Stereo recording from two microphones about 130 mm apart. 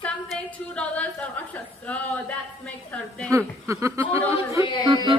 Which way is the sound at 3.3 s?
25° right (ahead or behind).